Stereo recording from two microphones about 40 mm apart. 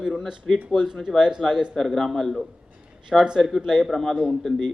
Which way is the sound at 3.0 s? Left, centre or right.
Centre.